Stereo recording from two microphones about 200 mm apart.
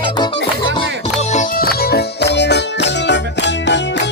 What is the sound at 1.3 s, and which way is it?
Music, 40° left (ahead or behind).